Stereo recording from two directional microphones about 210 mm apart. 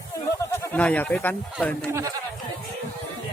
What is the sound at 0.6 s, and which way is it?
Speech, 5° left (ahead or behind).